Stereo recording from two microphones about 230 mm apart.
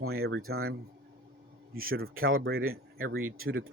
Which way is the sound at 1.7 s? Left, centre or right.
Right.